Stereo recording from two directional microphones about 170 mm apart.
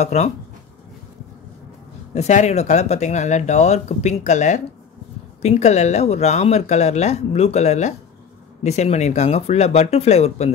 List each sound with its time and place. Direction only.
0.0 s speech: 40° left (ahead or behind)
2.1 s speech: 40° left (ahead or behind)